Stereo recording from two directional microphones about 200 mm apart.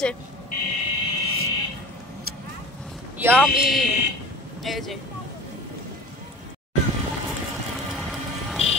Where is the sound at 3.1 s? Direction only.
10° right (ahead or behind).